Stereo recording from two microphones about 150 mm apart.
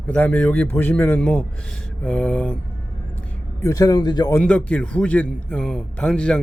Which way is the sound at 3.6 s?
25° left (ahead or behind).